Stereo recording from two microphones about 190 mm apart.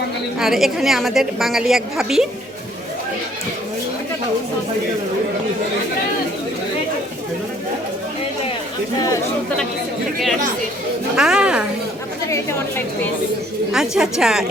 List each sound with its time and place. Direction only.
0.3 s a woman's voice: centre (ahead or behind)
9.0 s a woman's voice: 15° left (ahead or behind)
11.2 s a woman's voice: 5° right (ahead or behind)
12.3 s a woman's voice: 15° left (ahead or behind)
13.7 s a woman's voice: 5° right (ahead or behind)